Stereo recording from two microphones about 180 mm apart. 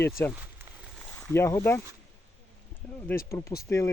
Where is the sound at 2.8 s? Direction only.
5° left (ahead or behind).